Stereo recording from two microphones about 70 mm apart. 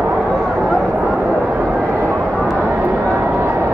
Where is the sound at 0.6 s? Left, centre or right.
Centre.